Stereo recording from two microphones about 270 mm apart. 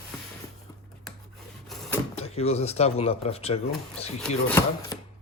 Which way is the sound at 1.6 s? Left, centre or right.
Centre.